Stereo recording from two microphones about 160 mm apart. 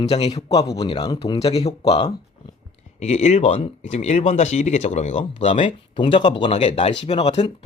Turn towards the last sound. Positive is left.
turn(degrees=40)  # may be behind; listen again after turning